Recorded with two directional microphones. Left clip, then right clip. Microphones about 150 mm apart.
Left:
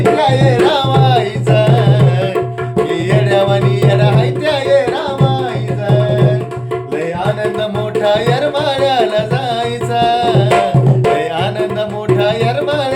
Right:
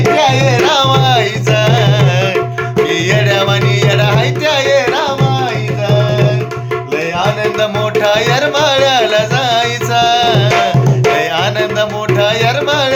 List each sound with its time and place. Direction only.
0.5 s tabla: 15° right (ahead or behind)
2.9 s music: 20° right (ahead or behind)
7.6 s music: 15° right (ahead or behind)